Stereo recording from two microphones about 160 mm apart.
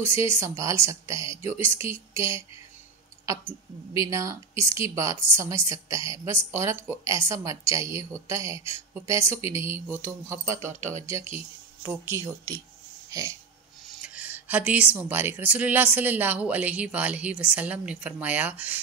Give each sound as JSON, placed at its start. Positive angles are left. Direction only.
{"t": 0.0, "sound": "a woman's voice", "side_deg": -15}
{"t": 4.1, "sound": "a woman's voice", "side_deg": -20}
{"t": 10.7, "sound": "speech", "side_deg": -50}
{"t": 11.1, "sound": "a woman's voice", "side_deg": -20}
{"t": 13.1, "sound": "a sound", "side_deg": -20}
{"t": 13.8, "sound": "speech", "side_deg": -5}